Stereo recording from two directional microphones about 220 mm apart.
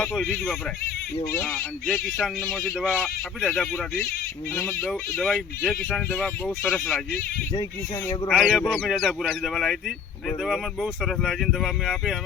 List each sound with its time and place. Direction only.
0.0 s speech: 5° left (ahead or behind)
7.5 s speech: 20° left (ahead or behind)
8.3 s speech: centre (ahead or behind)